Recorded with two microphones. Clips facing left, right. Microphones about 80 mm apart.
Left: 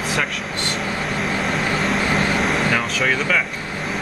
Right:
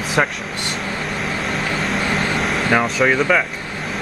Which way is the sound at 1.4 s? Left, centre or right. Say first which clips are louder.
Left 1 dB; centre.